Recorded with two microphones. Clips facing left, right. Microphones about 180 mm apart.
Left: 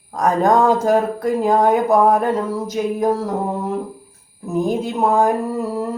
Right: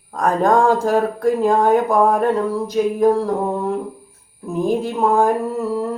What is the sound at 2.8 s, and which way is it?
Speech, 5° left (ahead or behind).